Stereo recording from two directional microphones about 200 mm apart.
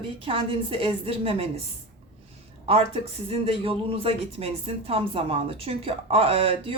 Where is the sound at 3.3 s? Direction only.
30° right (ahead or behind).